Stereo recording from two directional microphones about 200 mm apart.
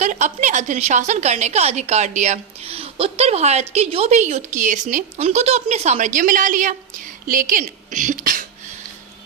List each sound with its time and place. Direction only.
0.0 s a woman's voice: 35° right (ahead or behind)